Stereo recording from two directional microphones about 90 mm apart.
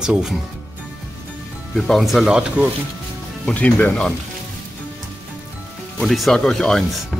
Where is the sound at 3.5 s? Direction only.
15° left (ahead or behind).